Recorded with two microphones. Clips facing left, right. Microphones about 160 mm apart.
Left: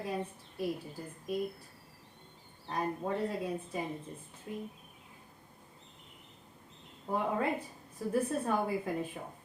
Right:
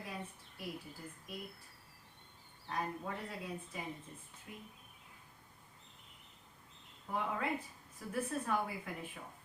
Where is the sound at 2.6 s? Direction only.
30° left (ahead or behind).